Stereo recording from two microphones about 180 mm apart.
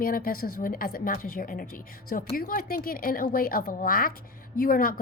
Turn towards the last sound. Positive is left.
turn(degrees=55)  # may be behind; listen again after turning